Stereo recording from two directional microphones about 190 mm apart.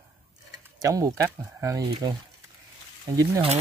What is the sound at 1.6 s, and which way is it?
Speech, 15° right (ahead or behind).